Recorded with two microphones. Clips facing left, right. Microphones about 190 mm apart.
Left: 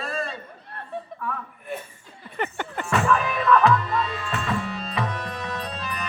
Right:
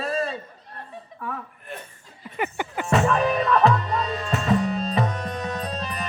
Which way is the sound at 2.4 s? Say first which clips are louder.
Right 1 dB; 10° right (ahead or behind).